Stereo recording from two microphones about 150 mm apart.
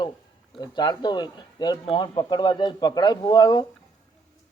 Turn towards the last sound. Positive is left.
turn(degrees=30)  # may be behind; listen again after turning